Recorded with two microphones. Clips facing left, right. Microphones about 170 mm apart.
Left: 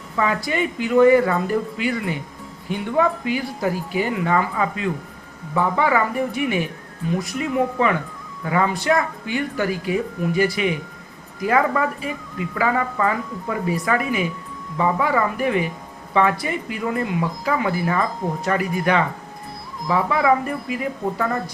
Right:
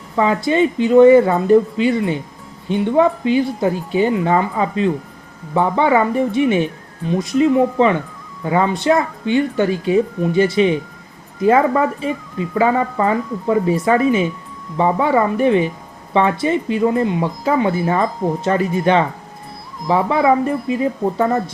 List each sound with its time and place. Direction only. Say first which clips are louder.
0.2 s speech: right 7 dB; 25° right (ahead or behind)